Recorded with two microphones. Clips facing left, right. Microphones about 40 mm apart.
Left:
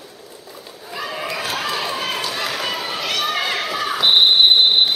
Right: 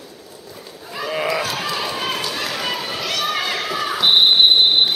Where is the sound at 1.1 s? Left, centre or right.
Centre.